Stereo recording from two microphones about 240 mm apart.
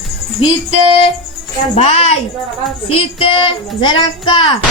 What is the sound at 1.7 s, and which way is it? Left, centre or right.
Speech, left.